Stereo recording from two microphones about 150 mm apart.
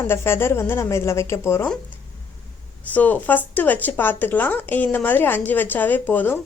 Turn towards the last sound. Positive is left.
turn(degrees=10)  # may be behind; listen again after turning